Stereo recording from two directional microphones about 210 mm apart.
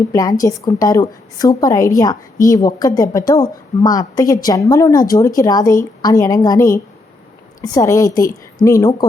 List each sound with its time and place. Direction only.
0.1 s a woman's voice: 15° left (ahead or behind)